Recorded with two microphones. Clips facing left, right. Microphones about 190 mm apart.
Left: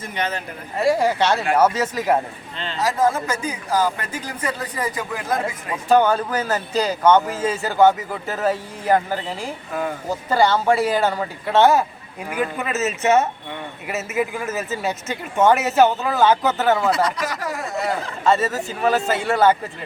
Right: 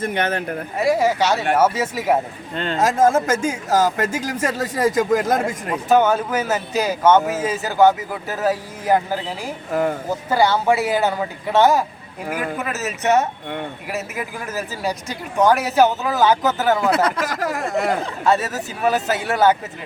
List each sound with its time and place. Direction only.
0.0 s speech: 55° right (ahead or behind)
0.8 s speech: centre (ahead or behind)
2.6 s speech: 50° right (ahead or behind)
4.3 s speech: 85° right
4.9 s speech: 45° right (ahead or behind)
5.7 s speech: 5° right (ahead or behind)
16.9 s speech: 55° right (ahead or behind)
18.3 s speech: centre (ahead or behind)